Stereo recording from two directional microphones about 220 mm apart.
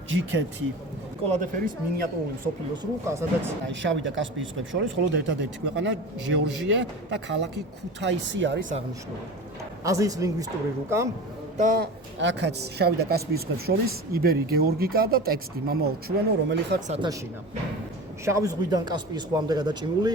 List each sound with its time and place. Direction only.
0.1 s speech: 60° right (ahead or behind)
1.3 s speech: 35° right (ahead or behind)
3.1 s a man's voice: 15° right (ahead or behind)
3.7 s speech: 55° right (ahead or behind)
9.8 s a man's voice: 15° right (ahead or behind)
11.5 s speech: 35° right (ahead or behind)
12.2 s speech: 55° right (ahead or behind)
16.9 s speech: 20° right (ahead or behind)
18.3 s speech: 15° right (ahead or behind)